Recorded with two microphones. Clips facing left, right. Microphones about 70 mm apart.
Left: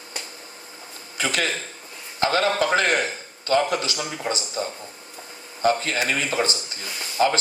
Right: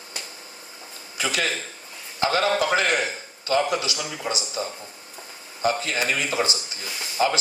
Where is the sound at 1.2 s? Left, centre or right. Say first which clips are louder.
Left 1 dB; left.